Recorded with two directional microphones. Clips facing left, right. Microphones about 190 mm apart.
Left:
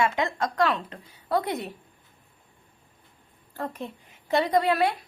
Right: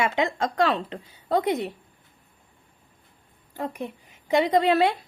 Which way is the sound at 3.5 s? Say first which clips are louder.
Right 2 dB; 15° right (ahead or behind).